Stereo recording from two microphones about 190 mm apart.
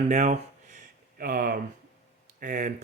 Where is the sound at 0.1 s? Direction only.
40° right (ahead or behind).